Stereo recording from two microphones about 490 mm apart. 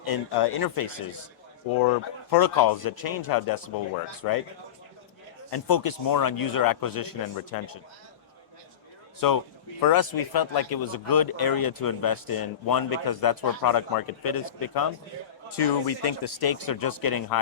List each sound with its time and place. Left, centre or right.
0.1 s speech: left
5.5 s speech: left
9.2 s a man's voice: left